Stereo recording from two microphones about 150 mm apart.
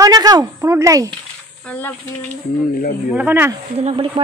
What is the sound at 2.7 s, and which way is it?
Speech, 75° left (ahead or behind).